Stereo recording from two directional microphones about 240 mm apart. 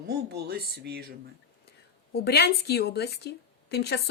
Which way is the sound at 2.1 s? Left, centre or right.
Left.